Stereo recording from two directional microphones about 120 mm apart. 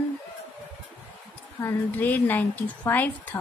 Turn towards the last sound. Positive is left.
turn(degrees=15)  # may be behind; listen again after turning